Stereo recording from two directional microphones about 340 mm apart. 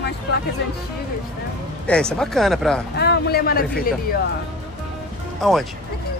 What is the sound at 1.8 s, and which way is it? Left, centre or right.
Speech, centre.